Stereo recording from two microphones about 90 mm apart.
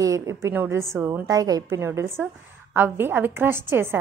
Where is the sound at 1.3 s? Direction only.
45° right (ahead or behind).